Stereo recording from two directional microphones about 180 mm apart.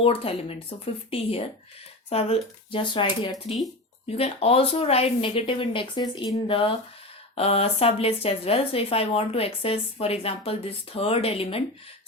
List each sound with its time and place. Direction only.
0.0 s speech: 30° left (ahead or behind)